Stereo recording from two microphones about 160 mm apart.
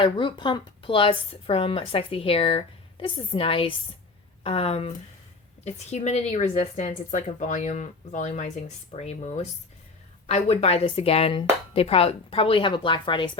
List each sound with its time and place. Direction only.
0.0 s a woman's voice: 30° left (ahead or behind)